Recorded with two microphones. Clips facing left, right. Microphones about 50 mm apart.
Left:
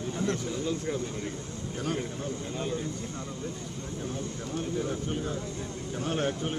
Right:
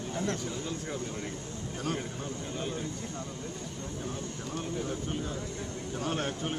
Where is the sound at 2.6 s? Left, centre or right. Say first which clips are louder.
Left 3 dB; right.